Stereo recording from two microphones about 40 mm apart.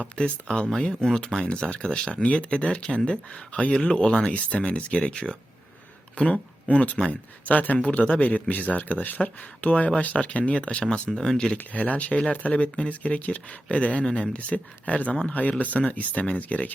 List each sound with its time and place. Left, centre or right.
0.2 s speech: left
0.8 s speech: centre
1.2 s speech: left
2.2 s speech: left
4.3 s speech: left
10.9 s speech: left
11.7 s speech: left